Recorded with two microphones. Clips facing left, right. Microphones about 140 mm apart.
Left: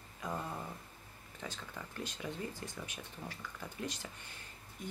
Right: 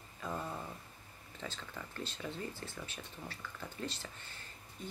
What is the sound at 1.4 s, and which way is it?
Speech, 10° left (ahead or behind).